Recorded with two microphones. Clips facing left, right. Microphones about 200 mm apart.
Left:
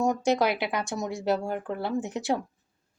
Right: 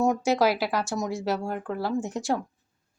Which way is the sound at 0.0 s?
5° right (ahead or behind).